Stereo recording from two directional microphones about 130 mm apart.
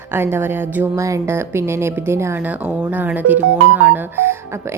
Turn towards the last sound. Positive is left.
turn(degrees=-20)  # may be behind; listen again after turning